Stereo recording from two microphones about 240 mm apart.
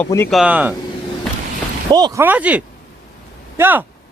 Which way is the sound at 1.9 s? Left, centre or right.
Centre.